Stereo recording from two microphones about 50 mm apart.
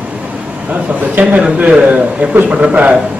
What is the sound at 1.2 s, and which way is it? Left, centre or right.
Speech, right.